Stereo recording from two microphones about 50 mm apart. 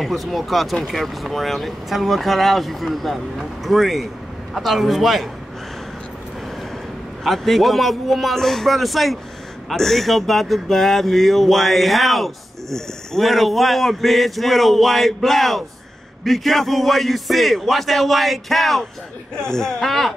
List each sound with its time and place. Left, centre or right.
0.0 s speech: centre
7.2 s speech: centre
19.3 s speech: centre